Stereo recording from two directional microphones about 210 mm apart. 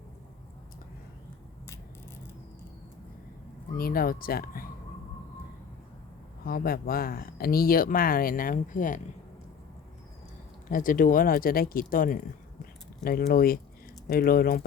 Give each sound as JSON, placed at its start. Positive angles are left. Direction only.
{"t": 3.8, "sound": "speech", "side_deg": 45}
{"t": 6.4, "sound": "speech", "side_deg": 45}
{"t": 10.7, "sound": "speech", "side_deg": 40}